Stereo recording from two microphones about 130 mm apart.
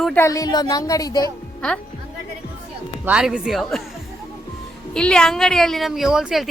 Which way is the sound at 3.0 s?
10° right (ahead or behind).